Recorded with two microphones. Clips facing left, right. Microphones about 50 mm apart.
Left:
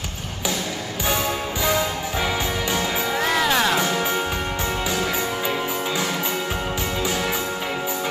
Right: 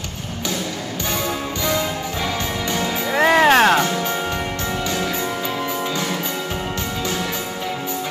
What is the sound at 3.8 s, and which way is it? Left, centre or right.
Music, centre.